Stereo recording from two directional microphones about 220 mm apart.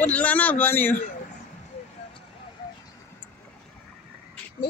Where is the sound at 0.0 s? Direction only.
5° left (ahead or behind).